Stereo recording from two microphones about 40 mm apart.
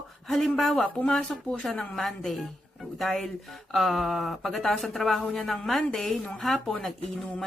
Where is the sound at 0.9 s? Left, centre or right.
Left.